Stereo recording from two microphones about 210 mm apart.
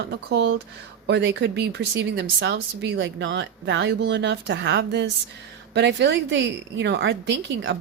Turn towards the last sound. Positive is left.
turn(degrees=-60)  # may be behind; listen again after turning